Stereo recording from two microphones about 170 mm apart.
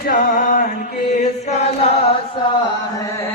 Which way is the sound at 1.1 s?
40° left (ahead or behind).